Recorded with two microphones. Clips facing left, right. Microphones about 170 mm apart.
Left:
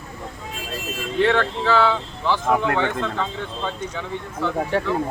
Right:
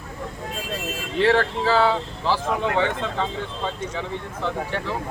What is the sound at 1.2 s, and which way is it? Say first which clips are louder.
Speech: even; 35° right (ahead or behind).